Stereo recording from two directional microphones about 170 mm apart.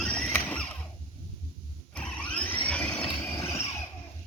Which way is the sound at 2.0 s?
5° left (ahead or behind).